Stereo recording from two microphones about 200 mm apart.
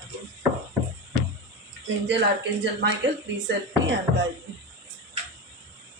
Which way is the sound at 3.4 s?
60° right (ahead or behind).